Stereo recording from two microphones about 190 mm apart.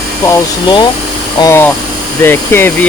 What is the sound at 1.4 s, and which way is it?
Speech, 15° left (ahead or behind).